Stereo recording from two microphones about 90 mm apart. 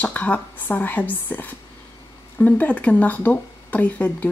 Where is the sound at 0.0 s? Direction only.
15° left (ahead or behind).